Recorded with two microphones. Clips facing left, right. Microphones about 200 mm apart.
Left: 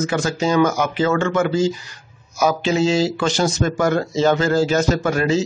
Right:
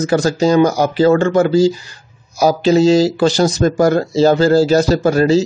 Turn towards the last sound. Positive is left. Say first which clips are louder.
# right 6 dB
turn(degrees=-35)  # may be behind; listen again after turning